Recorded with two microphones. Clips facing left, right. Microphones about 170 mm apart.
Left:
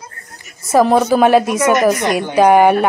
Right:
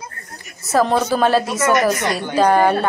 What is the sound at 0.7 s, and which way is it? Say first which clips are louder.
A woman's voice: left 5 dB; 10° left (ahead or behind).